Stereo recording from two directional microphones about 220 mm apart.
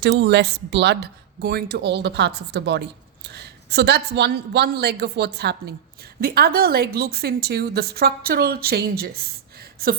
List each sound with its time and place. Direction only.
0.0 s speech: 50° right (ahead or behind)